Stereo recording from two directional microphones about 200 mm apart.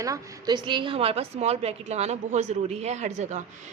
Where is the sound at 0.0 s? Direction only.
20° right (ahead or behind).